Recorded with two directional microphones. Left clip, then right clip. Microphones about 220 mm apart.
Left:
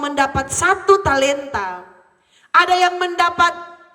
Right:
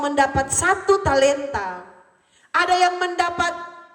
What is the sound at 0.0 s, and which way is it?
A woman's voice, 15° left (ahead or behind).